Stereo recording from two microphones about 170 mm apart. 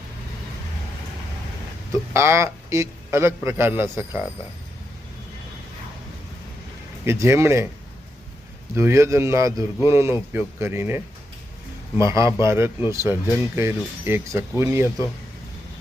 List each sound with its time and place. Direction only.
1.9 s speech: 15° right (ahead or behind)
7.0 s speech: 15° right (ahead or behind)
8.7 s speech: 15° right (ahead or behind)